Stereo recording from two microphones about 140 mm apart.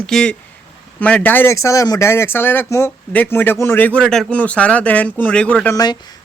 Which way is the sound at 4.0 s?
5° left (ahead or behind).